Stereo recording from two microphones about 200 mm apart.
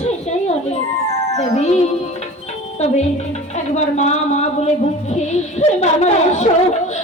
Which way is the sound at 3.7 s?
35° left (ahead or behind).